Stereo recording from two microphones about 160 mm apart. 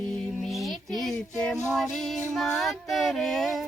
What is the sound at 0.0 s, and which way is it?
Music, 5° left (ahead or behind).